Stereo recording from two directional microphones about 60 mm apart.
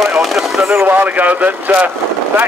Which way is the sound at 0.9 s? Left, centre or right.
Right.